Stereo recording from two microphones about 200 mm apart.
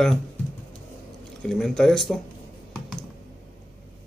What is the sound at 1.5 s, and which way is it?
Speech, 5° left (ahead or behind).